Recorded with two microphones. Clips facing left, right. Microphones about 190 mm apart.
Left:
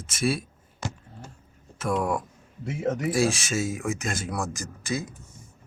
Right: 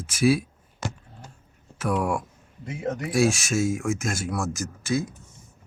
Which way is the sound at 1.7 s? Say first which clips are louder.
Right 1 dB; centre (ahead or behind).